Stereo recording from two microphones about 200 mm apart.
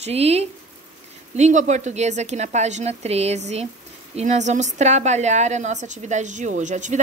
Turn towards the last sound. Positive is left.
turn(degrees=-35)  # may be behind; listen again after turning